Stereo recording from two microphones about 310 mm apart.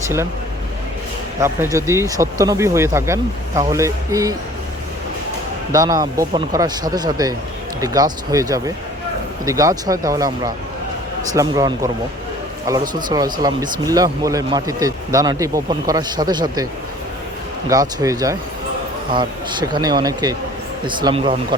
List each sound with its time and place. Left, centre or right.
1.4 s speech: centre
5.7 s speech: centre
17.7 s speech: centre